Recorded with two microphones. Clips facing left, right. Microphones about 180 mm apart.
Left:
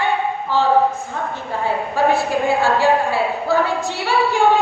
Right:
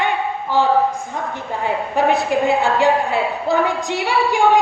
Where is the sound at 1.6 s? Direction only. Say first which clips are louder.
Even; 20° right (ahead or behind).